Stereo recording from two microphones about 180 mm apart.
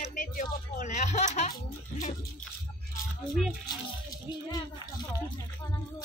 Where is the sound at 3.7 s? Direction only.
20° left (ahead or behind).